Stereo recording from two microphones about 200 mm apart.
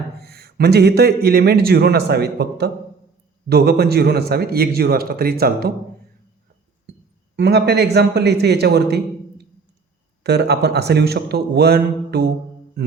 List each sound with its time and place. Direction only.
0.2 s a man's voice: 50° right (ahead or behind)
7.3 s a man's voice: 55° right (ahead or behind)
10.2 s a man's voice: 55° right (ahead or behind)